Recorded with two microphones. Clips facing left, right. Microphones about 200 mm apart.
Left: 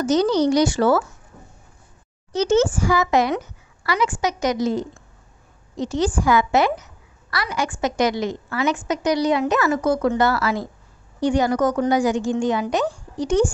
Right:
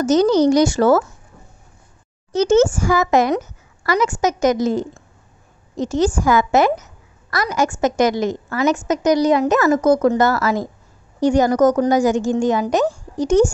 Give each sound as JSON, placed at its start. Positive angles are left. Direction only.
{"t": 0.0, "sound": "a woman's voice", "side_deg": -45}
{"t": 2.3, "sound": "a woman's voice", "side_deg": -45}